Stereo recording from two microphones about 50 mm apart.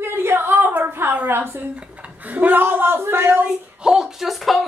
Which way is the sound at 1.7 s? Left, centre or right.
Right.